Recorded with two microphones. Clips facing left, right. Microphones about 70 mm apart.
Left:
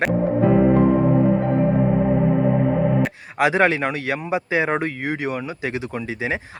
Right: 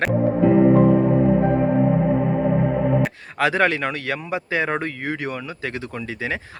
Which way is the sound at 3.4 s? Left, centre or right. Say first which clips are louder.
Left 2 dB; centre.